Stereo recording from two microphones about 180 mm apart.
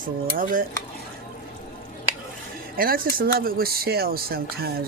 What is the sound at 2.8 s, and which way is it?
Speech, 55° right (ahead or behind).